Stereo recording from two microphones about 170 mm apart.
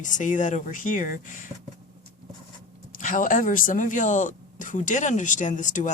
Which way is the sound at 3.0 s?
50° left (ahead or behind).